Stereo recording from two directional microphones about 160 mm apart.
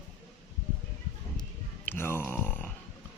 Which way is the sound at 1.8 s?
15° left (ahead or behind).